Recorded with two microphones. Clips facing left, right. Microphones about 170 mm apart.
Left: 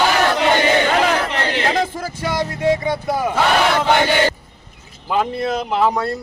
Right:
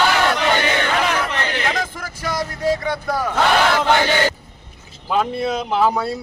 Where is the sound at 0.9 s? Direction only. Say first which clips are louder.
Left 3 dB; 35° left (ahead or behind).